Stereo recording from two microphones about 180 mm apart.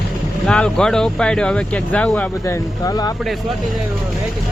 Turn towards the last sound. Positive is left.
turn(degrees=20)  # may be behind; listen again after turning